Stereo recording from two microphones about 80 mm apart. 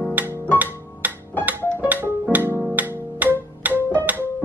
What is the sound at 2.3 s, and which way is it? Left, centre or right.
Music, right.